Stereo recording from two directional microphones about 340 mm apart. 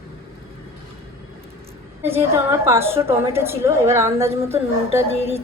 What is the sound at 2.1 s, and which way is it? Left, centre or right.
A woman's voice, centre.